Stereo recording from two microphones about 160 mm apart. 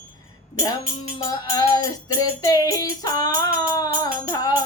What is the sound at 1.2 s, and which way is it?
Music, 20° left (ahead or behind).